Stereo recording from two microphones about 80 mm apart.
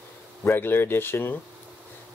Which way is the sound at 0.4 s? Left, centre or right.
Left.